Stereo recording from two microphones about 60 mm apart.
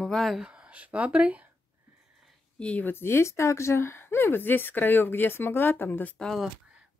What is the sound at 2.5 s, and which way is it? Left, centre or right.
Speech, centre.